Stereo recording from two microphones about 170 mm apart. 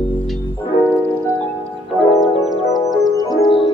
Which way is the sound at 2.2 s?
Centre (ahead or behind).